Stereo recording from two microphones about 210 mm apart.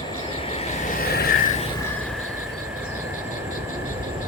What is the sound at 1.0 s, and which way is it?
Vehicle, 45° left (ahead or behind).